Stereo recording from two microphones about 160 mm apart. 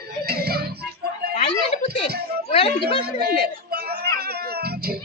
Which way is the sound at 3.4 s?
75° right (ahead or behind).